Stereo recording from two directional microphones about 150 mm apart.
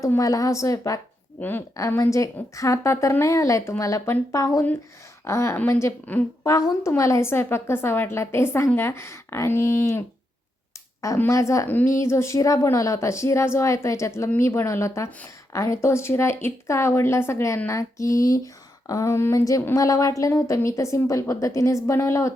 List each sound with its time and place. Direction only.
0.0 s a woman's voice: 20° left (ahead or behind)
11.0 s a woman's voice: 20° left (ahead or behind)